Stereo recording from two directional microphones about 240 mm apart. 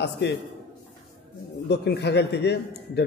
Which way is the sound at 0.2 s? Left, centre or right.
Left.